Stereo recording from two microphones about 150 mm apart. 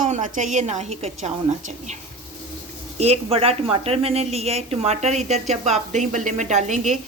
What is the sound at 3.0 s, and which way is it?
A woman's voice, 45° right (ahead or behind).